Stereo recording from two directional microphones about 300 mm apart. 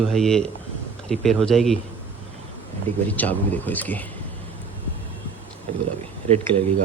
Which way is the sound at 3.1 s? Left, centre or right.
Centre.